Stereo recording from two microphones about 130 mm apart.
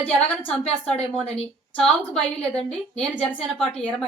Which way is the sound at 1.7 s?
5° left (ahead or behind).